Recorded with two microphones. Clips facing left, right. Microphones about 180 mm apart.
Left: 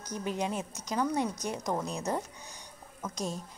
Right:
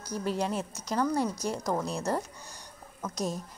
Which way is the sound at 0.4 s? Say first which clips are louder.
Right 2 dB; centre (ahead or behind).